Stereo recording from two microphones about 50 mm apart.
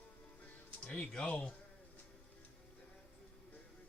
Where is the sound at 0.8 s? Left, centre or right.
Left.